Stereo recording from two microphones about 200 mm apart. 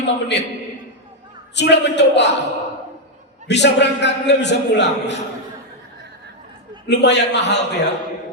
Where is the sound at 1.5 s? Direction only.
60° left (ahead or behind).